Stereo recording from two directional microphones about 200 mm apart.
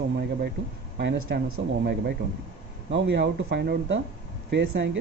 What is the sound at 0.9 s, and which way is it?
Speech, 60° right (ahead or behind).